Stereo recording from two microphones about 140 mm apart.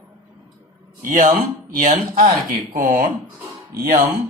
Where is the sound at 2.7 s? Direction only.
70° right (ahead or behind).